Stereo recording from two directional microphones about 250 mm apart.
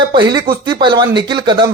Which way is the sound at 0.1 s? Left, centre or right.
Centre.